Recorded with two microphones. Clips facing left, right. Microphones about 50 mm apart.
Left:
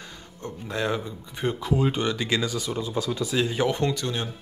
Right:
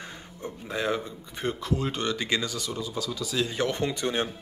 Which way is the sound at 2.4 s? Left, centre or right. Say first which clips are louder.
Left 4 dB; centre.